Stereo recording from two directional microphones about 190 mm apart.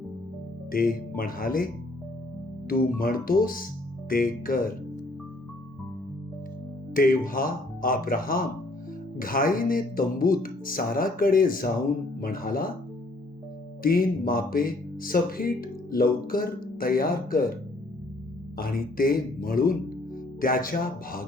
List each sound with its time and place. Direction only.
0.7 s speech: 50° left (ahead or behind)
6.9 s speech: 45° left (ahead or behind)
13.8 s speech: 50° left (ahead or behind)
18.5 s speech: 50° left (ahead or behind)